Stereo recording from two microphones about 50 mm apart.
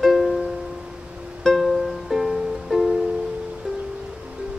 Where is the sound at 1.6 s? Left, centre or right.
Centre.